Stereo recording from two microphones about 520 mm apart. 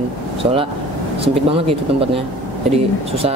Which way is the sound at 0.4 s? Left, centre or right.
Centre.